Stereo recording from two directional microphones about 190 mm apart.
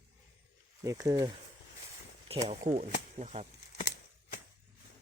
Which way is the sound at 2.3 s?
35° right (ahead or behind).